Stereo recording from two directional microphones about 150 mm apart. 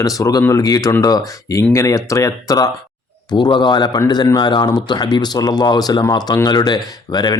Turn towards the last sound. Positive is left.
turn(degrees=25)  # may be behind; listen again after turning